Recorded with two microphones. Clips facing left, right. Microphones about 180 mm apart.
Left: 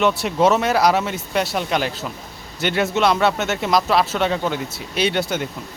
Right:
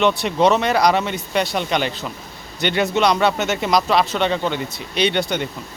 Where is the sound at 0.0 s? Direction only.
5° left (ahead or behind).